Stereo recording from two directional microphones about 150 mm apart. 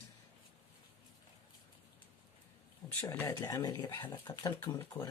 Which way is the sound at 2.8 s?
15° left (ahead or behind).